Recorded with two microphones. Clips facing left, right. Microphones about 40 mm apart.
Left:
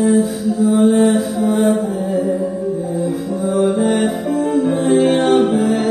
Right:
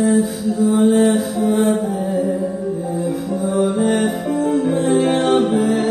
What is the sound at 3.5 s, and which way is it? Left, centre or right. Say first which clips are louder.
Music: left 2 dB; centre.